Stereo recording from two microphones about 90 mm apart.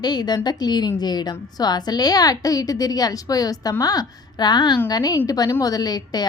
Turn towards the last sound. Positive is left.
turn(degrees=45)  # may be behind; listen again after turning